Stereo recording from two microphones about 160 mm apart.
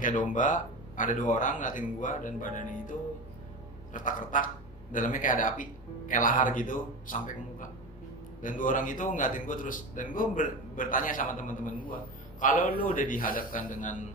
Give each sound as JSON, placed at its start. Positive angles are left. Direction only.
{"t": 0.0, "sound": "a man's voice", "side_deg": 55}